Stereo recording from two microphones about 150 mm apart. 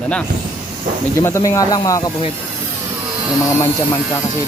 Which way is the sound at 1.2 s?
20° left (ahead or behind).